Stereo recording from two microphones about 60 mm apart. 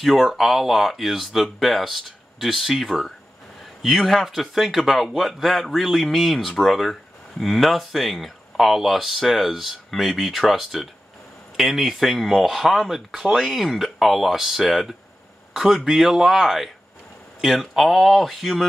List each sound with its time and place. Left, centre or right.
0.0 s a man's voice: centre